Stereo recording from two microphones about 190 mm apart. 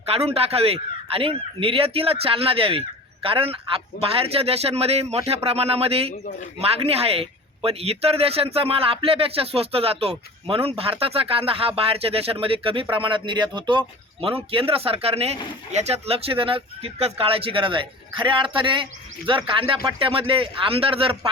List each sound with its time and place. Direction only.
0.0 s speech: 30° right (ahead or behind)